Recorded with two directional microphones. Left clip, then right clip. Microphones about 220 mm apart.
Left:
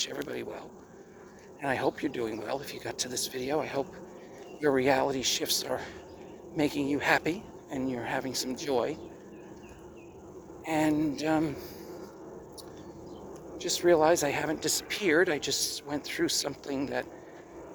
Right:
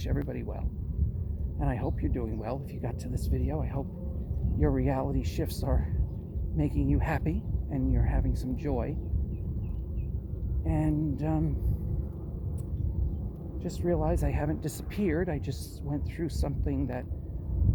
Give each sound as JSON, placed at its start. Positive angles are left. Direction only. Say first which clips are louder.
{"t": 1.6, "sound": "speech", "louder": "left 5 dB", "side_deg": 15}
{"t": 10.7, "sound": "speech", "louder": "left 4 dB", "side_deg": 15}
{"t": 13.6, "sound": "speech", "louder": "left 7 dB", "side_deg": 15}